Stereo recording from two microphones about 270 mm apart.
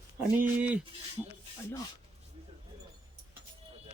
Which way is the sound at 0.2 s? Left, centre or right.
Centre.